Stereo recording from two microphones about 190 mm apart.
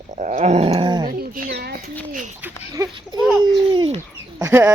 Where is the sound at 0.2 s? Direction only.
40° right (ahead or behind); by 1.0 s 25° right (ahead or behind).